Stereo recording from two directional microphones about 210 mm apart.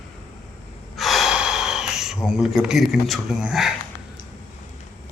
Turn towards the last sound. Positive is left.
turn(degrees=-5)  # may be behind; listen again after turning